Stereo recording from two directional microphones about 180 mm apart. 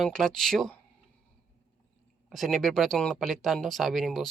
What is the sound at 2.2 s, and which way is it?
Speech, centre (ahead or behind).